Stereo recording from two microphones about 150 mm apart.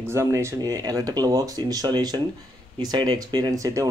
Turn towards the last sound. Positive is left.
turn(degrees=-25)  # may be behind; listen again after turning